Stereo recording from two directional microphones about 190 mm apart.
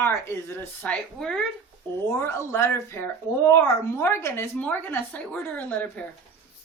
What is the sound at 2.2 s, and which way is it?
Speech, 15° left (ahead or behind).